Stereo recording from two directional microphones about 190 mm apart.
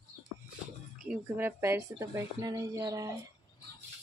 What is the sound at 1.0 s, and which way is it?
A woman's voice, 10° right (ahead or behind).